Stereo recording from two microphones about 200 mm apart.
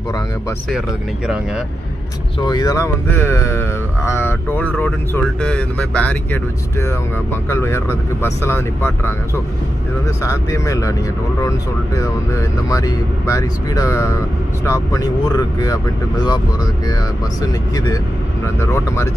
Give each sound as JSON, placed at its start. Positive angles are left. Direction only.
{"t": 0.7, "sound": "speech", "side_deg": -5}
{"t": 2.4, "sound": "speech", "side_deg": 20}
{"t": 10.2, "sound": "speech", "side_deg": 15}
{"t": 17.4, "sound": "speech", "side_deg": 15}